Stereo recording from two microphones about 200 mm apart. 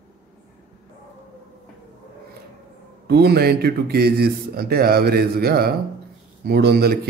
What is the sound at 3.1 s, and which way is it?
A man's voice, 55° right (ahead or behind).